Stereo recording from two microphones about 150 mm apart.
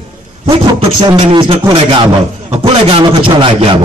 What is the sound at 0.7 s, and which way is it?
A man's voice, 30° right (ahead or behind).